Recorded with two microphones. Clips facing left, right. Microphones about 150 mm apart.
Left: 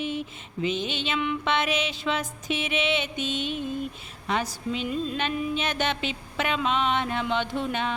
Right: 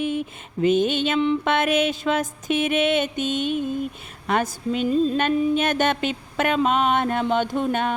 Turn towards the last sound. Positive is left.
turn(degrees=-50)  # may be behind; listen again after turning